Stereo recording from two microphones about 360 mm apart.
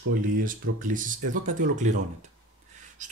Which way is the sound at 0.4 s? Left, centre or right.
Right.